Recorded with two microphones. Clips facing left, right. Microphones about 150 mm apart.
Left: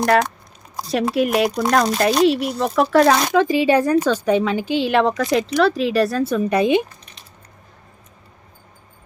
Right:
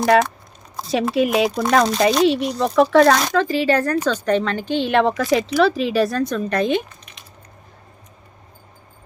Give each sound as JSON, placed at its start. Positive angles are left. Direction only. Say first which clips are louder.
{"t": 0.0, "sound": "speech", "louder": "right 1 dB", "side_deg": -5}
{"t": 3.2, "sound": "speech", "louder": "left 2 dB", "side_deg": 15}